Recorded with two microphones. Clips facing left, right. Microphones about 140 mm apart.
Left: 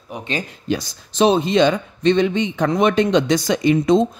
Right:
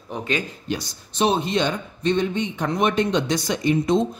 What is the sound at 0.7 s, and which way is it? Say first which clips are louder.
Speech: left 6 dB; 90° left.